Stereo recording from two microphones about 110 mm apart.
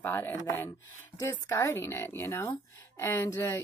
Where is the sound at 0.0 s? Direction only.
20° left (ahead or behind).